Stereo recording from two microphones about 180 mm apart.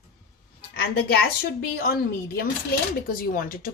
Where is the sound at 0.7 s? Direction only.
60° left (ahead or behind).